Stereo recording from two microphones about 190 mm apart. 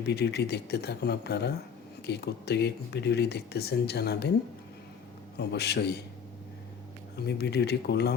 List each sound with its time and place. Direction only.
0.0 s speech: 60° left (ahead or behind)
5.4 s speech: 60° left (ahead or behind)
7.2 s speech: 60° left (ahead or behind)